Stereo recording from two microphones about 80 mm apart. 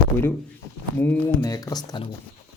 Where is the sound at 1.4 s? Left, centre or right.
Left.